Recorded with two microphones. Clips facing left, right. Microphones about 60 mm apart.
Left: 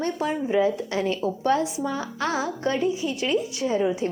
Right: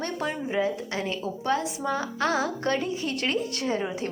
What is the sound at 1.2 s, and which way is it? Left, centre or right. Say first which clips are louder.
Speech: left 5 dB; left.